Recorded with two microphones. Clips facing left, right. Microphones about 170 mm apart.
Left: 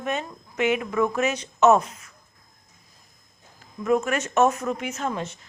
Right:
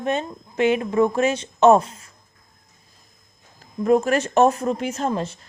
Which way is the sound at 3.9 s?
35° right (ahead or behind).